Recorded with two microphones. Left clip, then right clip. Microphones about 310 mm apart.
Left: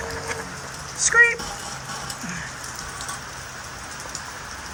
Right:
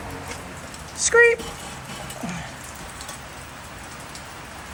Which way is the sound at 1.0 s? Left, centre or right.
Centre.